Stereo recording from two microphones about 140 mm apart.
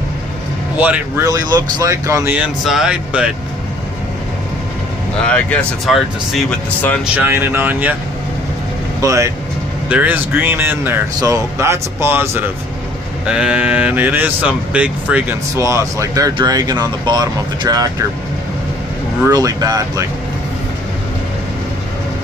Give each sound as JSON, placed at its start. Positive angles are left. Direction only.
{"t": 0.7, "sound": "speech", "side_deg": -10}
{"t": 1.2, "sound": "speech", "side_deg": -25}
{"t": 5.2, "sound": "speech", "side_deg": 10}
{"t": 7.2, "sound": "speech", "side_deg": -15}
{"t": 9.0, "sound": "speech", "side_deg": -20}
{"t": 15.5, "sound": "speech", "side_deg": -20}
{"t": 19.2, "sound": "speech", "side_deg": -25}